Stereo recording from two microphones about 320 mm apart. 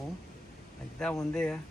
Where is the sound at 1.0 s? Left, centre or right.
Centre.